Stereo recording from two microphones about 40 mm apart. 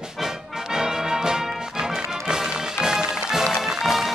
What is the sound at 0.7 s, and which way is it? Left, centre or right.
Music, centre.